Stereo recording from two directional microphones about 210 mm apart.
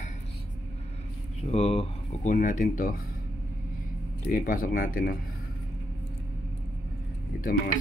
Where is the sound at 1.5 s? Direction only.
30° left (ahead or behind).